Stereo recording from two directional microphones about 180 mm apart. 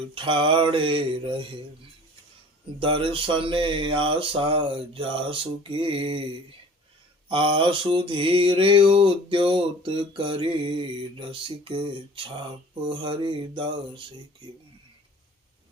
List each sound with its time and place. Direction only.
0.0 s mantra: 30° right (ahead or behind)
2.8 s mantra: 30° right (ahead or behind)
7.3 s mantra: 30° right (ahead or behind)